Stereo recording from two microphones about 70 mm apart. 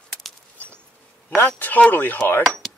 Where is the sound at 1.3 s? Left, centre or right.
Left.